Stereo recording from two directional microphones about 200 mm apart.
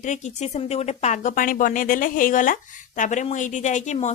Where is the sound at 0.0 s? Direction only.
35° left (ahead or behind).